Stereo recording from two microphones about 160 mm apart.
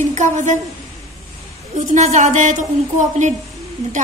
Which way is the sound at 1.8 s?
45° right (ahead or behind).